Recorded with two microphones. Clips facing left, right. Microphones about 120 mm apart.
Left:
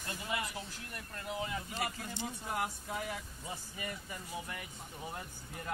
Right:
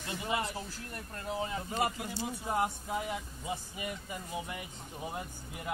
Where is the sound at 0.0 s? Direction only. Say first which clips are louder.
Right 4 dB; 20° right (ahead or behind).